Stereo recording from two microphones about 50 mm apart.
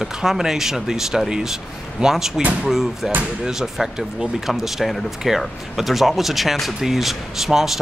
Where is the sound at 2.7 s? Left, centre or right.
Centre.